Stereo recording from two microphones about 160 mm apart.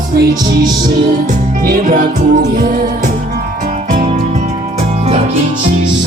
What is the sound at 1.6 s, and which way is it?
Music, 60° right (ahead or behind).